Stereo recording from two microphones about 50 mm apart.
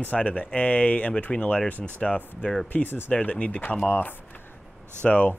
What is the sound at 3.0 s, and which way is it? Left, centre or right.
Speech, left.